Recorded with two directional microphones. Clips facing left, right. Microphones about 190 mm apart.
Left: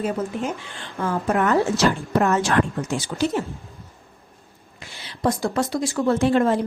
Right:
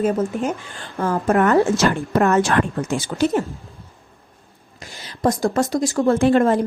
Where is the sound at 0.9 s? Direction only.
35° right (ahead or behind).